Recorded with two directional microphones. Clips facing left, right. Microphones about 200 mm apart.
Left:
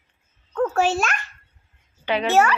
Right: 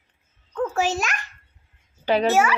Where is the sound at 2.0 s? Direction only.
40° right (ahead or behind).